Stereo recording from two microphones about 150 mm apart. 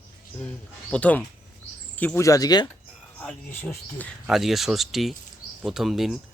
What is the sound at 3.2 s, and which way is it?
Speech, 10° left (ahead or behind).